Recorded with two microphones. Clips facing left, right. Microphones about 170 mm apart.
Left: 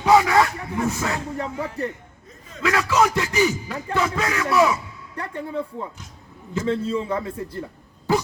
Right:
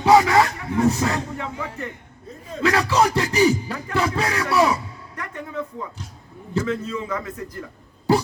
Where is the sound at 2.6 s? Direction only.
35° right (ahead or behind).